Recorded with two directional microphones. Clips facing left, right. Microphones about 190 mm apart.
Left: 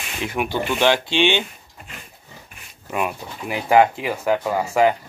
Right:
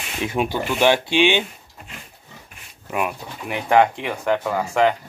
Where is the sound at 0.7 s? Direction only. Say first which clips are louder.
Right 2 dB; 10° right (ahead or behind).